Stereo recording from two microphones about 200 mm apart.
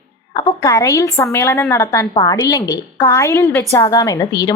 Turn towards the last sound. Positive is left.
turn(degrees=20)  # may be behind; listen again after turning